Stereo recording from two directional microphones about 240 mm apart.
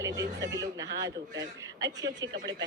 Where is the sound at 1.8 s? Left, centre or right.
Centre.